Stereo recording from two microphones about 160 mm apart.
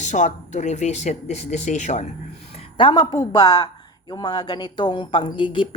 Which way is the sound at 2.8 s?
30° left (ahead or behind).